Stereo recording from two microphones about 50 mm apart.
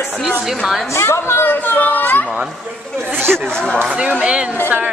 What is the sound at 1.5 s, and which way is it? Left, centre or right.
Chatter, left.